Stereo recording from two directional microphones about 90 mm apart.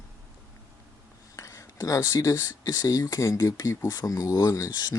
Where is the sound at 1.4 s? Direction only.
35° left (ahead or behind).